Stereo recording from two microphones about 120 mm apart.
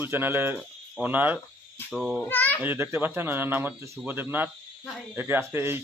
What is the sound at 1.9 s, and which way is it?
Speech, centre (ahead or behind).